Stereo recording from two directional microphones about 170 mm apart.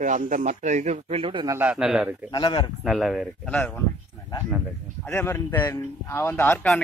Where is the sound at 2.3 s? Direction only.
25° left (ahead or behind).